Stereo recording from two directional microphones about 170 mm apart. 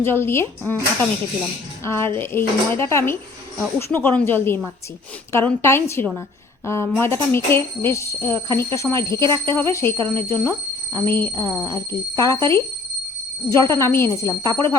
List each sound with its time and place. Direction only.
0.0 s speech: 15° left (ahead or behind)
1.8 s speech: 15° left (ahead or behind)